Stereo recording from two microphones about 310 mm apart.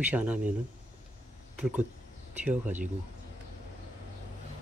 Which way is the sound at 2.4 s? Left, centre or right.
Centre.